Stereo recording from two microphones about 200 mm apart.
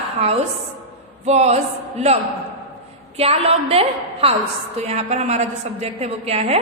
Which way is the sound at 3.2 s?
30° right (ahead or behind).